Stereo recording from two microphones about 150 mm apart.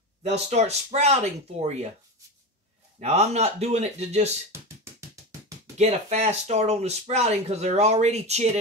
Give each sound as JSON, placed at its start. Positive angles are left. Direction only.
{"t": 0.2, "sound": "speech", "side_deg": -45}
{"t": 3.0, "sound": "speech", "side_deg": -45}
{"t": 5.8, "sound": "speech", "side_deg": -45}